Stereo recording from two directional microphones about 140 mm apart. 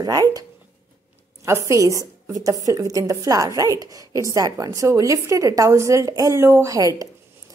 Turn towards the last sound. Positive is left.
turn(degrees=-25)  # may be behind; listen again after turning